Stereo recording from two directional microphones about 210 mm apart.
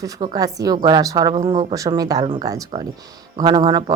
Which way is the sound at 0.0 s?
20° right (ahead or behind).